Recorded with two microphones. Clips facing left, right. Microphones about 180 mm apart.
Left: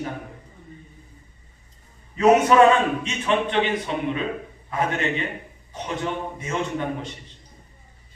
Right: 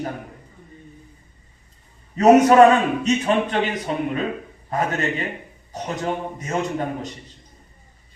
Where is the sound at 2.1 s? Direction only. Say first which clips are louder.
Right 3 dB; 40° right (ahead or behind).